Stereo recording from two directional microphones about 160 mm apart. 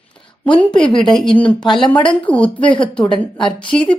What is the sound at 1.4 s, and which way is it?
Speech, 30° left (ahead or behind).